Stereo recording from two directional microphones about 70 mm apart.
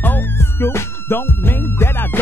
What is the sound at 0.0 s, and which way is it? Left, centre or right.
Music, left.